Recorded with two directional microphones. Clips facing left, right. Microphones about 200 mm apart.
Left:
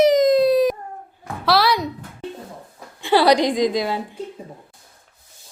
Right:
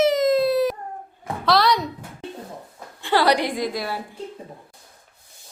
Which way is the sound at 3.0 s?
15° left (ahead or behind).